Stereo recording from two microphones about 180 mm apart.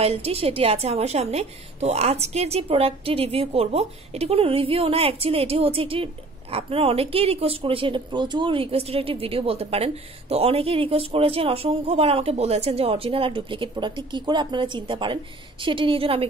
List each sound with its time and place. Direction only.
0.0 s speech: 35° right (ahead or behind)